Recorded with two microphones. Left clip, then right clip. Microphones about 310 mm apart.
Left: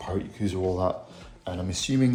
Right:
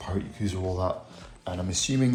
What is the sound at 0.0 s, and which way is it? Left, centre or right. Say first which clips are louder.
Speech: left 2 dB; centre.